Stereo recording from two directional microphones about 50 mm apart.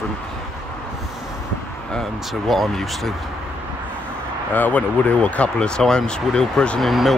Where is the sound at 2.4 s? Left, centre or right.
Centre.